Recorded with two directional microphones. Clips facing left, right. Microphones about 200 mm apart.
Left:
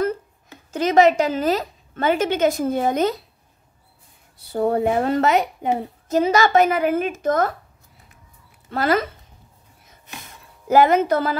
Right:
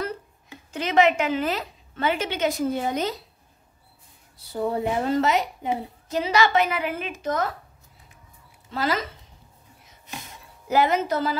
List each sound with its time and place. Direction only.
0.7 s a woman's voice: 40° left (ahead or behind)
4.5 s a woman's voice: 60° left (ahead or behind)
8.6 s speech: 55° left (ahead or behind)
10.7 s a woman's voice: 50° left (ahead or behind)